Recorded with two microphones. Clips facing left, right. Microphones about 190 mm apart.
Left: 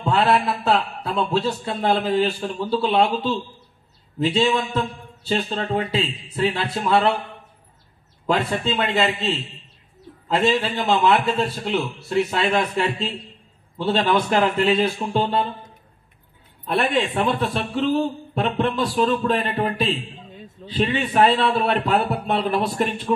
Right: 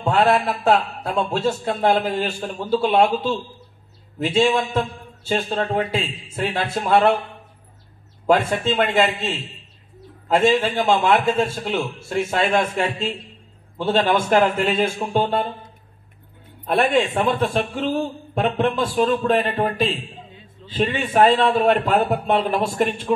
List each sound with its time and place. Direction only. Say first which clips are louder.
0.7 s a man's voice: right 6 dB; 45° right (ahead or behind)
8.3 s a man's voice: right 3 dB; 50° right (ahead or behind)
16.6 s a man's voice: right 3 dB; 45° right (ahead or behind)